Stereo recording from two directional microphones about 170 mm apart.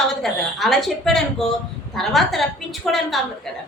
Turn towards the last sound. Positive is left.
turn(degrees=0)  # may be behind; listen again after turning